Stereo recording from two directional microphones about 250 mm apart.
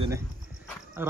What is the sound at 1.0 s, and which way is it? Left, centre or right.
Speech, centre.